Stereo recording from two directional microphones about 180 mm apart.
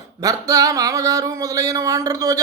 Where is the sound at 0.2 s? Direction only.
20° right (ahead or behind).